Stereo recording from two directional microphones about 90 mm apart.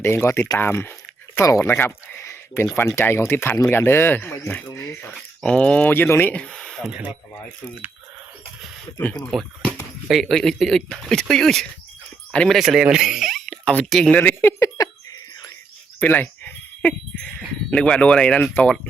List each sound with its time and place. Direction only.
0.0 s speech: 30° left (ahead or behind)
5.1 s speech: 10° left (ahead or behind)
6.3 s speech: 10° left (ahead or behind)
6.8 s speech: 10° right (ahead or behind)
9.3 s speech: centre (ahead or behind)
12.5 s speech: 5° right (ahead or behind)
13.5 s speech: 10° left (ahead or behind)
14.2 s speech: 20° left (ahead or behind)
16.0 s a sound: 20° left (ahead or behind)
17.2 s speech: 10° left (ahead or behind)